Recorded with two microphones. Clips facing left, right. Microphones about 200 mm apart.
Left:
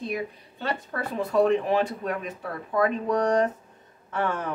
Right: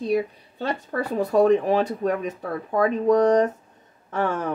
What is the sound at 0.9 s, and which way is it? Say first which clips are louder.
Speech: right 8 dB; 40° right (ahead or behind).